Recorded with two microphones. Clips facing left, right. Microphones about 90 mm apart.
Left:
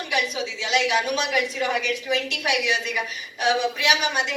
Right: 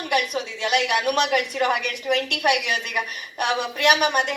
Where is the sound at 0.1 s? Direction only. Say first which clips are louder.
Right 3 dB; 50° right (ahead or behind).